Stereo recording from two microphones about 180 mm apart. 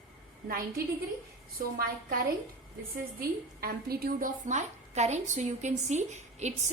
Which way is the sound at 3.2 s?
60° right (ahead or behind).